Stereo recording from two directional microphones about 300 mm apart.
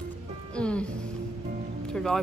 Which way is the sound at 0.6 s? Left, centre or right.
Centre.